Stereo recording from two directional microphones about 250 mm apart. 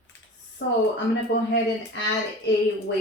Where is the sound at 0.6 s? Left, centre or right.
Left.